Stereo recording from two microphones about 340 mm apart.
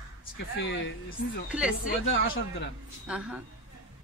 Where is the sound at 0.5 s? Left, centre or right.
Left.